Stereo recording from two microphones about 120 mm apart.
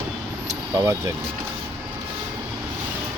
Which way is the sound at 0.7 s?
25° right (ahead or behind).